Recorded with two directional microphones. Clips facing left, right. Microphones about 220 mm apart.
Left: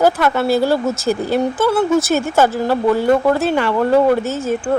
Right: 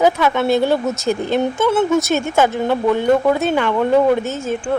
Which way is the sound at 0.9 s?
30° left (ahead or behind).